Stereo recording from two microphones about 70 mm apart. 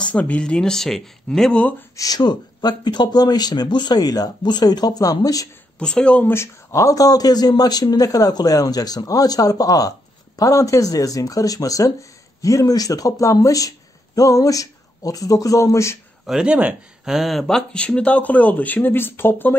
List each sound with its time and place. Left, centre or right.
0.0 s speech: centre
1.6 s speech: left
2.0 s speech: left
5.8 s speech: centre
6.3 s speech: left
16.3 s speech: centre
17.0 s speech: centre; by 19.5 s left